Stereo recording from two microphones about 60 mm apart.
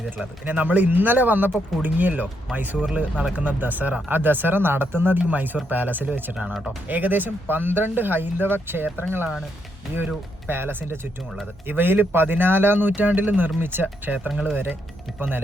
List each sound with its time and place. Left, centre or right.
0.4 s speech: right
10.5 s speech: right
14.3 s speech: centre
14.5 s speech: right